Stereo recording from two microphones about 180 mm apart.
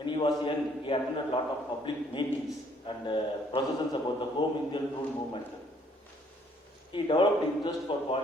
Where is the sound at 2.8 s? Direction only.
25° left (ahead or behind).